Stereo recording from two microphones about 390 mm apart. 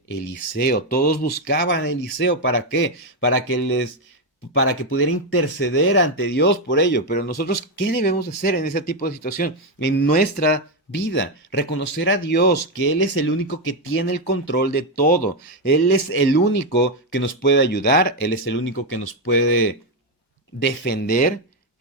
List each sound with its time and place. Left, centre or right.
0.5 s speech: left